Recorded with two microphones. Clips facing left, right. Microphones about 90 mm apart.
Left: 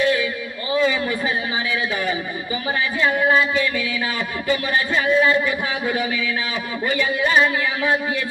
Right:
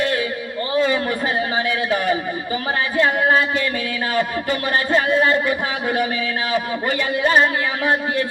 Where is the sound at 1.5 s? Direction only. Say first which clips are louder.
Right 3 dB; 50° right (ahead or behind).